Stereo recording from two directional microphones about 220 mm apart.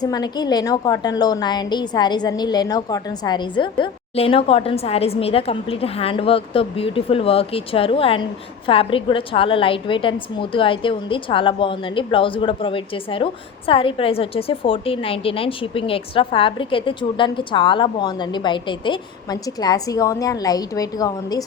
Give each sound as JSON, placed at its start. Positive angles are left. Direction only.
{"t": 0.0, "sound": "a woman's voice", "side_deg": 20}